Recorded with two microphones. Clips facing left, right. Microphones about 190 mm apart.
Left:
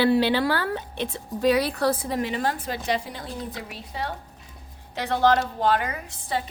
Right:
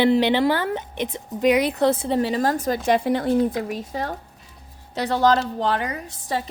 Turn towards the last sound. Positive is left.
turn(degrees=-35)  # may be behind; listen again after turning